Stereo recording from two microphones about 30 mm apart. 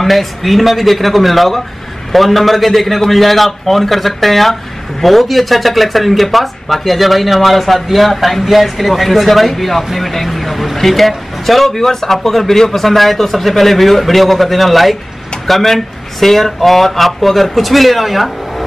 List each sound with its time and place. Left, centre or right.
0.0 s speech: centre